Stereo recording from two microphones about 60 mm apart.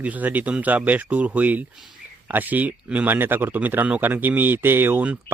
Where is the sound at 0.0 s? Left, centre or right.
Right.